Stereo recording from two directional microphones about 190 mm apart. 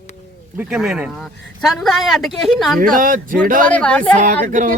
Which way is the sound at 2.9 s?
45° right (ahead or behind).